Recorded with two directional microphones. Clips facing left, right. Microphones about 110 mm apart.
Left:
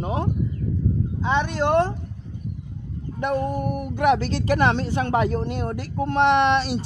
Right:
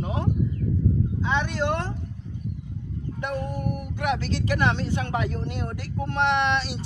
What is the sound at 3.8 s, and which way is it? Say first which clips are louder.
Speech: left 9 dB; 45° left (ahead or behind).